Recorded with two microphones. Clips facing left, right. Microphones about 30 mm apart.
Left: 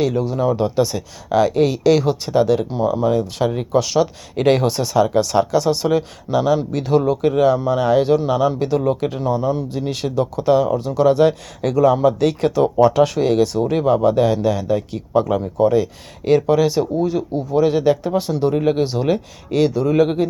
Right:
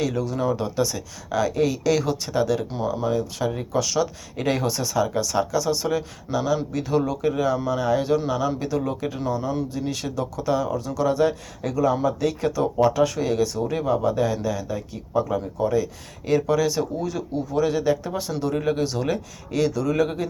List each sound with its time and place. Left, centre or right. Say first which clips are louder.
0.1 s speech: left 5 dB; left
0.8 s speech: left 6 dB; left
9.9 s speech: left 7 dB; left
15.6 s speech: left 8 dB; left
17.7 s speech: left 6 dB; left